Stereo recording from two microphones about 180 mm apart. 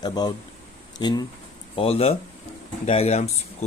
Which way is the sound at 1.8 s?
35° left (ahead or behind).